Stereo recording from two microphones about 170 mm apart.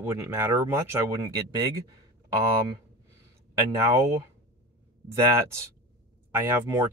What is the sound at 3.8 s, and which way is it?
Speech, 20° right (ahead or behind).